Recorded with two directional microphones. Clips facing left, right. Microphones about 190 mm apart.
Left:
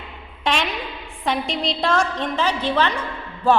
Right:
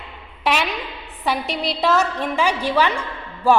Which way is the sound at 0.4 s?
5° right (ahead or behind).